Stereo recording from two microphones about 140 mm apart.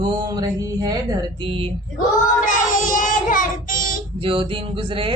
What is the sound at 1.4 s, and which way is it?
Speech, 40° right (ahead or behind).